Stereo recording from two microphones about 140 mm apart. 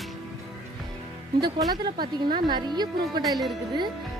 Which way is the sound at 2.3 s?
30° right (ahead or behind).